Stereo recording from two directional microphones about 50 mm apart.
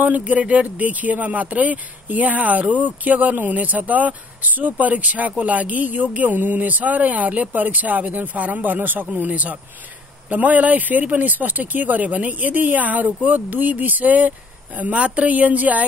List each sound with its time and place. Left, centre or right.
0.0 s speech: right